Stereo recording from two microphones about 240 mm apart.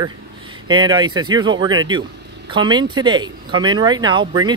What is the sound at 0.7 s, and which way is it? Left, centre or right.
Speech, centre.